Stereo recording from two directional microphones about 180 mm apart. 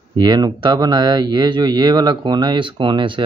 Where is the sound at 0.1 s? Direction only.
25° right (ahead or behind).